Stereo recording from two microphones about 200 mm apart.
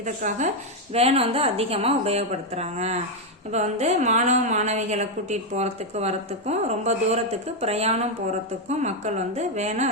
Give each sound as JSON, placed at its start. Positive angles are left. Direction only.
{"t": 0.0, "sound": "a woman's voice", "side_deg": -40}